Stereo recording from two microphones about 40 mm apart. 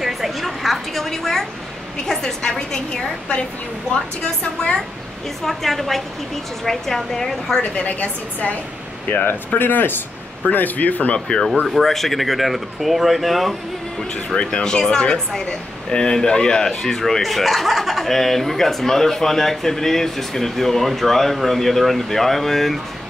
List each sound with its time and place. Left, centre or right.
0.0 s a sound: centre
2.0 s speech: centre
5.4 s speech: centre
7.7 s a woman's voice: left
9.1 s speech: left
10.5 s a woman's voice: left
11.1 s speech: centre
11.6 s speech: centre
14.1 s speech: left; by 22.8 s centre